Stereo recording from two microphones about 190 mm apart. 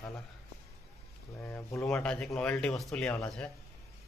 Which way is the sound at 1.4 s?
15° left (ahead or behind).